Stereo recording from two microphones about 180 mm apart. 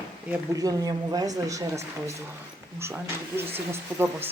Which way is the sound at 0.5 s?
20° right (ahead or behind).